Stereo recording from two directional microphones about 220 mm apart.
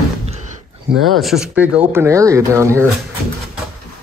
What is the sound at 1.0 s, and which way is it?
Speech, centre (ahead or behind).